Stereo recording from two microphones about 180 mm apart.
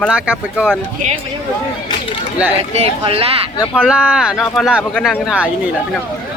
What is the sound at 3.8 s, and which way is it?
Speech, 5° right (ahead or behind).